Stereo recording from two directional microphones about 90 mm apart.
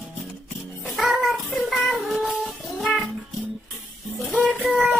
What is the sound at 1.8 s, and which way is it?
Child singing, centre (ahead or behind).